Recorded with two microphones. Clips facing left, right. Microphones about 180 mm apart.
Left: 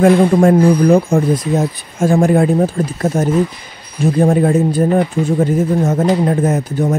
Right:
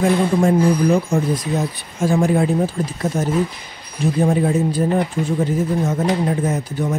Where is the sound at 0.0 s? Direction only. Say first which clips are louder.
Left 6 dB; 55° left (ahead or behind).